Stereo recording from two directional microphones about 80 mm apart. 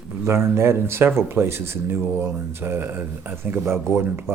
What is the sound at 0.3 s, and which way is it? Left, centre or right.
Speech, right.